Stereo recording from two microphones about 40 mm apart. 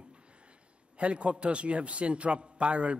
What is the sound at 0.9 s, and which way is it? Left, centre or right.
A man's voice, right.